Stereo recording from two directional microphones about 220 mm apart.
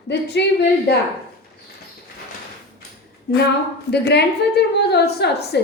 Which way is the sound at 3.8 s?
50° left (ahead or behind).